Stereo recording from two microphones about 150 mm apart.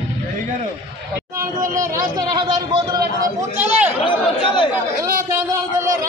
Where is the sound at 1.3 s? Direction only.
20° right (ahead or behind).